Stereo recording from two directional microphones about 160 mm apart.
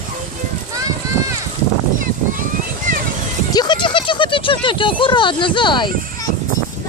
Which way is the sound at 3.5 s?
25° left (ahead or behind).